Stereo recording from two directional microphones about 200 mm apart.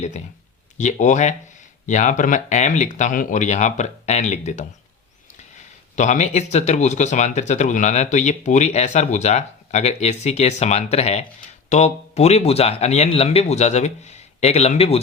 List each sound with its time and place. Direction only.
0.8 s speech: 35° left (ahead or behind)